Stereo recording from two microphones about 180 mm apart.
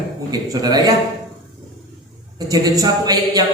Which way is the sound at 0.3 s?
20° right (ahead or behind).